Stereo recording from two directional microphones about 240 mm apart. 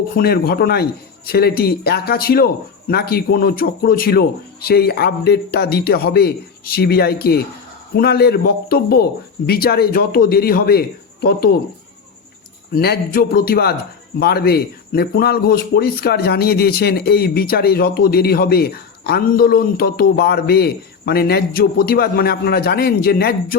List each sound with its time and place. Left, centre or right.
0.2 s a man's voice: left
12.7 s a man's voice: left